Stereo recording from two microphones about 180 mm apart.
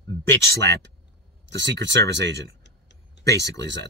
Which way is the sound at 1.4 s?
80° right.